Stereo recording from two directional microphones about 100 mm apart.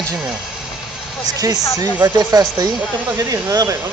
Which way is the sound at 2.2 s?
40° right (ahead or behind).